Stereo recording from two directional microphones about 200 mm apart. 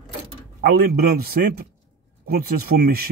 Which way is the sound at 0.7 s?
50° right (ahead or behind).